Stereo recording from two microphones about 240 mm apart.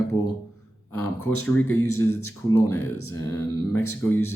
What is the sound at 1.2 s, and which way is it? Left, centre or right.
Speech, left.